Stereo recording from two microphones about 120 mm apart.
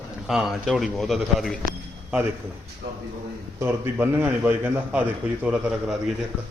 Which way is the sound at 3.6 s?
20° right (ahead or behind).